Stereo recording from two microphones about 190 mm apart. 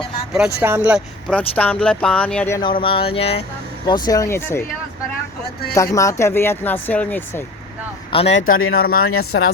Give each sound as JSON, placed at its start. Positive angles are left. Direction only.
{"t": 0.3, "sound": "speech", "side_deg": -5}
{"t": 1.3, "sound": "speech", "side_deg": 5}
{"t": 2.6, "sound": "a sound", "side_deg": 25}
{"t": 3.8, "sound": "speech", "side_deg": 20}
{"t": 5.7, "sound": "speech", "side_deg": 15}
{"t": 8.1, "sound": "speech", "side_deg": 30}
{"t": 8.8, "sound": "speech", "side_deg": 50}
{"t": 9.3, "sound": "speech", "side_deg": 75}